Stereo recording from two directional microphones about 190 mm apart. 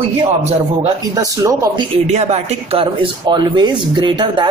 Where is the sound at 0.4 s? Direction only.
35° right (ahead or behind).